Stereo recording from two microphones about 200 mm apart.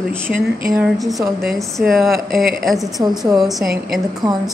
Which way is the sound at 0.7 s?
Centre (ahead or behind).